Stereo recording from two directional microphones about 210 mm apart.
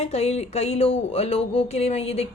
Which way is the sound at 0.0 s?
30° left (ahead or behind).